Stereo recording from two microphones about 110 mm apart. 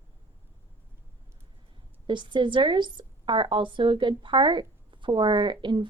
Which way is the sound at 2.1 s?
45° right (ahead or behind).